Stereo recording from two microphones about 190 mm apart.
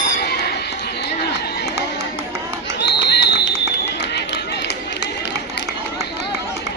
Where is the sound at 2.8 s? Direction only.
60° left (ahead or behind).